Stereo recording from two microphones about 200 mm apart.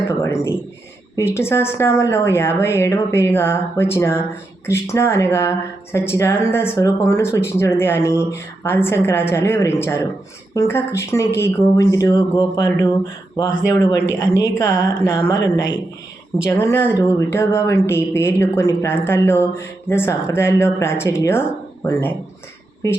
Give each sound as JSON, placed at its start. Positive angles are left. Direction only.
{"t": 0.2, "sound": "speech", "side_deg": 15}